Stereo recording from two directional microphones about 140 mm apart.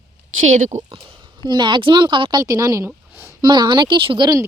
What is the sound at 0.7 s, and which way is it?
Speech, 60° right (ahead or behind).